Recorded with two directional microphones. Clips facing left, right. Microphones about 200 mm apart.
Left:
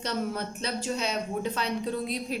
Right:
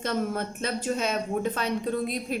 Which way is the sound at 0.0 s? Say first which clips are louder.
Right 3 dB; 50° right (ahead or behind).